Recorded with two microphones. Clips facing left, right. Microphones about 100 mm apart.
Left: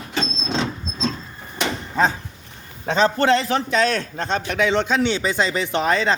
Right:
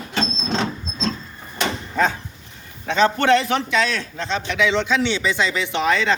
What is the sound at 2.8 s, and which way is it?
A man's voice, 35° left (ahead or behind).